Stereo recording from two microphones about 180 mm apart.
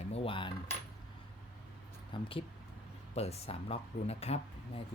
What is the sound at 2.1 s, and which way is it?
Speech, 30° left (ahead or behind).